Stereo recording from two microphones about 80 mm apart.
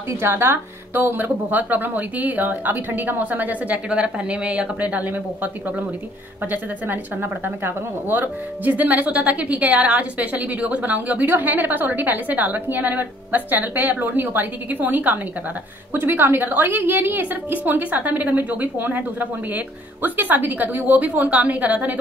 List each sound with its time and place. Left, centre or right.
0.1 s speech: right